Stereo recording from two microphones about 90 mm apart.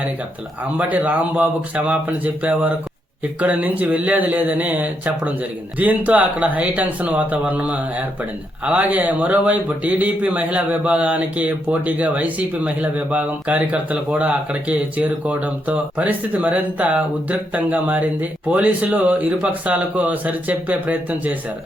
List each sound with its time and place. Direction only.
0.6 s speech: 20° right (ahead or behind)